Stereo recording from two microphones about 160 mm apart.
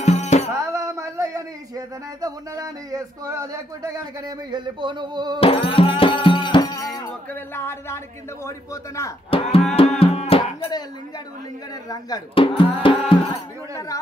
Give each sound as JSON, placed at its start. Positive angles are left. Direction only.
{"t": 0.0, "sound": "music", "side_deg": 45}
{"t": 0.6, "sound": "speech", "side_deg": -20}
{"t": 5.4, "sound": "music", "side_deg": 35}
{"t": 7.3, "sound": "a man's voice", "side_deg": 15}
{"t": 9.3, "sound": "speech", "side_deg": 35}
{"t": 9.7, "sound": "music", "side_deg": 40}
{"t": 11.9, "sound": "speech", "side_deg": 30}
{"t": 13.3, "sound": "a man's voice", "side_deg": 20}